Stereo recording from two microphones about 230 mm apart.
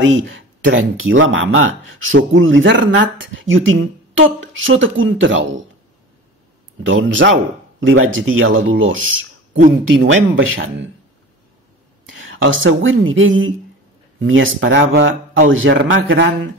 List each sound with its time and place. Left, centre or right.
0.0 s speech: right
6.8 s speech: right
9.9 s speech: right
12.1 s speech: right